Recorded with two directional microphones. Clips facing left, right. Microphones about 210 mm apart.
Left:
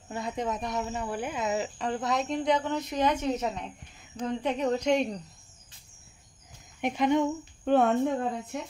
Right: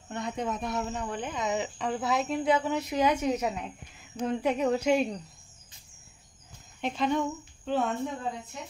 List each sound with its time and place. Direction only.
0.1 s speech: centre (ahead or behind)
6.8 s speech: 15° left (ahead or behind)
7.6 s speech: 55° left (ahead or behind)